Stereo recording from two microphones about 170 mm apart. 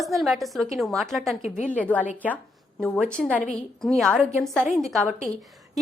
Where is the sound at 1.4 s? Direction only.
45° left (ahead or behind).